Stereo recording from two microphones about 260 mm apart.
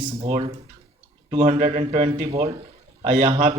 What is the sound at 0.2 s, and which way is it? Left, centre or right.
A man's voice, right.